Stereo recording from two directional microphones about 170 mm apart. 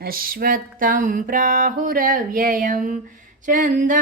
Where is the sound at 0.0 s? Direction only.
60° right (ahead or behind).